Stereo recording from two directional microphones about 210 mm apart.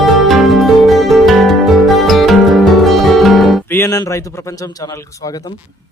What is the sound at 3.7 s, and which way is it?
A man's voice, 15° left (ahead or behind).